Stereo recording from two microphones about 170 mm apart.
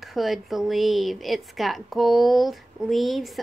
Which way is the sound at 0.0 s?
Centre (ahead or behind).